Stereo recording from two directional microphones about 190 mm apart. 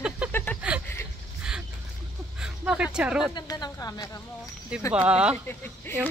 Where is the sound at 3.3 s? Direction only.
20° left (ahead or behind).